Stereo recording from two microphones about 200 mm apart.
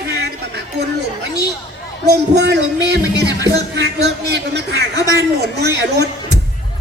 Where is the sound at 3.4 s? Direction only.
60° right (ahead or behind).